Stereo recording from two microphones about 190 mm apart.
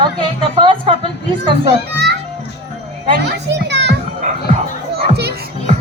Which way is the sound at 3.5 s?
65° right (ahead or behind).